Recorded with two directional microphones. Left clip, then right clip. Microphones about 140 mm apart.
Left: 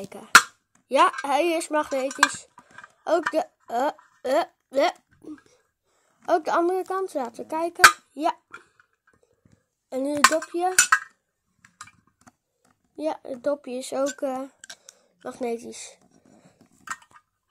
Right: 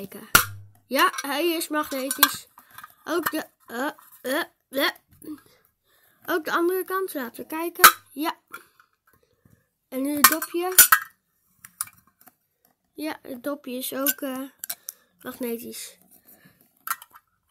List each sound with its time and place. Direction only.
0.0 s speech: 40° right (ahead or behind)
0.8 s dishes: 30° right (ahead or behind)
6.2 s speech: 35° right (ahead or behind)
9.8 s cutlery: 40° right (ahead or behind)
10.2 s cutlery: 20° right (ahead or behind)
10.7 s speech: 25° right (ahead or behind)
11.6 s typing: 25° right (ahead or behind)
12.9 s speech: 45° right (ahead or behind)
16.8 s a sound: 25° right (ahead or behind)